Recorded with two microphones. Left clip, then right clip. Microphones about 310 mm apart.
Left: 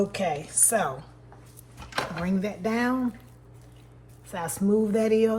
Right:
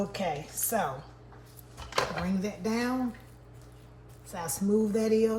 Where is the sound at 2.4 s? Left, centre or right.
Centre.